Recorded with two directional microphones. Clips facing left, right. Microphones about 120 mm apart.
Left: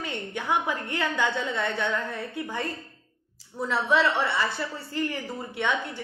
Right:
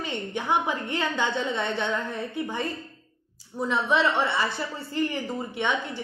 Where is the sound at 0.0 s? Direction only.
20° right (ahead or behind).